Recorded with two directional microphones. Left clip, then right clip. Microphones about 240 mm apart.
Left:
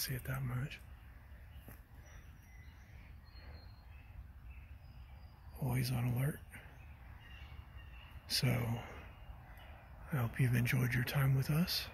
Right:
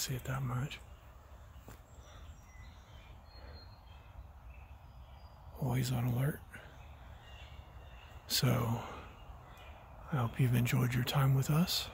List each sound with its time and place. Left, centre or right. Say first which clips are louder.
0.0 s speech: right 3 dB; centre
5.6 s speech: right 3 dB; centre
8.3 s speech: right 3 dB; right
10.0 s speech: right 3 dB; centre